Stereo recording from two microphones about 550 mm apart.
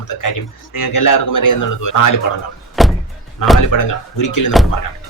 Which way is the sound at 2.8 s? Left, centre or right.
Centre.